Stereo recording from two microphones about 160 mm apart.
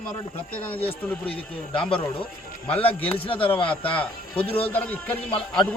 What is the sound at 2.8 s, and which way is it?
Speech, 35° left (ahead or behind).